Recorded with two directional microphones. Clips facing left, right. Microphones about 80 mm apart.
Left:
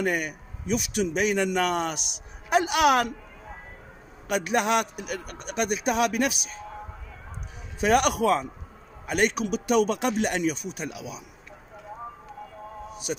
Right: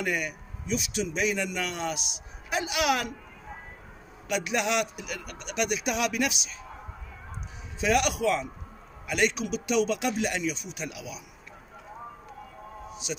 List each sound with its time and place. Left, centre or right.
0.0 s speech: left
4.3 s a man's voice: left
7.8 s speech: left